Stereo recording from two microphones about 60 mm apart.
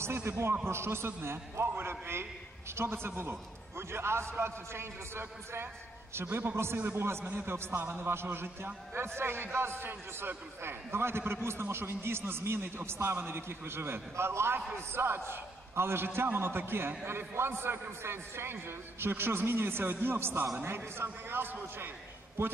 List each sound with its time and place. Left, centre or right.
0.0 s a man's voice: right